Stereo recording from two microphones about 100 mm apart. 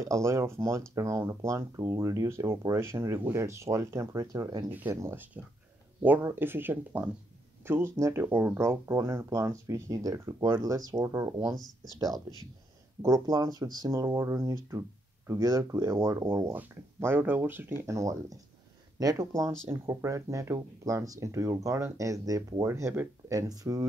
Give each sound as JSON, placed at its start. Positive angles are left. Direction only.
{"t": 0.0, "sound": "speech", "side_deg": -30}
{"t": 5.0, "sound": "speech", "side_deg": -20}
{"t": 8.6, "sound": "speech", "side_deg": -30}
{"t": 13.0, "sound": "speech", "side_deg": -40}
{"t": 16.5, "sound": "speech", "side_deg": -20}
{"t": 17.8, "sound": "speech", "side_deg": -35}